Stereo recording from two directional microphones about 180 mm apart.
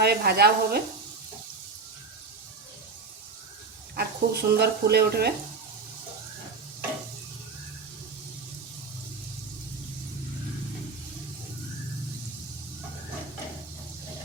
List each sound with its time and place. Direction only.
0.0 s speech: 60° right (ahead or behind)
3.9 s speech: 60° right (ahead or behind)